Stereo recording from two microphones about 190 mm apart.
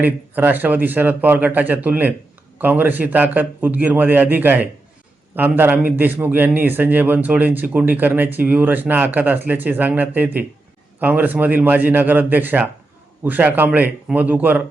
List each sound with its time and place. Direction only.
0.0 s a man's voice: 10° right (ahead or behind)